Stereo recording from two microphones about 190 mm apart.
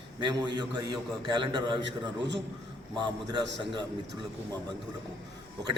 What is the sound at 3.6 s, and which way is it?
Speech, 25° right (ahead or behind).